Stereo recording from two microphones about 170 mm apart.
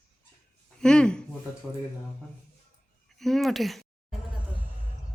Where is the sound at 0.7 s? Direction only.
5° left (ahead or behind).